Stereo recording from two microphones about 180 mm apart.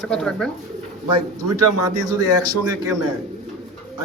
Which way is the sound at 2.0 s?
20° right (ahead or behind).